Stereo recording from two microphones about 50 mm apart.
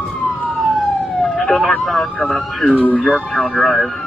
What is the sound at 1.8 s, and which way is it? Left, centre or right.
Speech, centre.